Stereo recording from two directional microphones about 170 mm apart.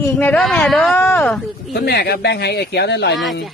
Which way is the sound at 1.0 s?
15° left (ahead or behind).